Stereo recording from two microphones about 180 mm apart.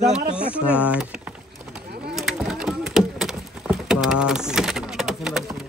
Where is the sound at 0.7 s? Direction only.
5° right (ahead or behind).